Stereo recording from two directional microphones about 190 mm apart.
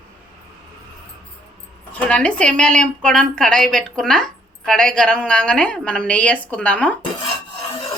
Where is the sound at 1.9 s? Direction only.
5° left (ahead or behind).